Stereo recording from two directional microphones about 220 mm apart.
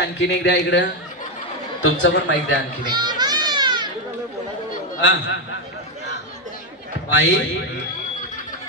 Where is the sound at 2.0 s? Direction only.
55° left (ahead or behind).